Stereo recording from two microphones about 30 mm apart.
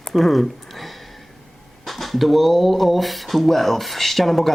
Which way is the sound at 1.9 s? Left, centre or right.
Centre.